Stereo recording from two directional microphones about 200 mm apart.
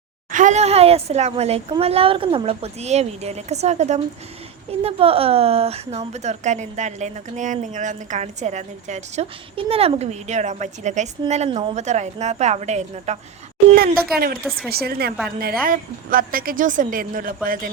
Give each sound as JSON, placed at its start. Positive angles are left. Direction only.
{"t": 0.3, "sound": "speech", "side_deg": -40}
{"t": 14.7, "sound": "a woman's voice", "side_deg": -50}